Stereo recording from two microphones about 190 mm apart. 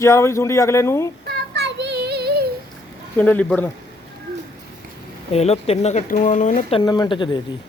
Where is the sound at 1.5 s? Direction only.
65° right (ahead or behind).